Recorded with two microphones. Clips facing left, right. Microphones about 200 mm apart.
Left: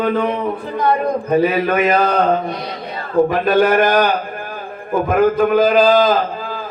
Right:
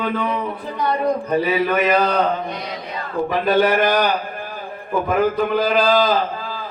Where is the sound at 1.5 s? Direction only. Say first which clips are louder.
Left 2 dB; 50° left (ahead or behind).